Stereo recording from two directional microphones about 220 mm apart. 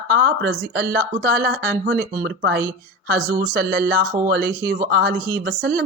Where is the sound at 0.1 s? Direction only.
45° right (ahead or behind).